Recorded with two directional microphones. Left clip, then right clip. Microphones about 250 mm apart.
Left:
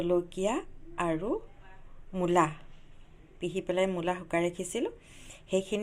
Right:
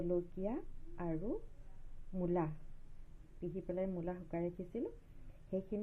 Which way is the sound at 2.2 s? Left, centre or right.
Centre.